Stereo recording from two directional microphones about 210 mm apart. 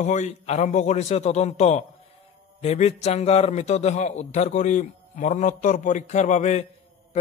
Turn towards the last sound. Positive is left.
turn(degrees=35)  # may be behind; listen again after turning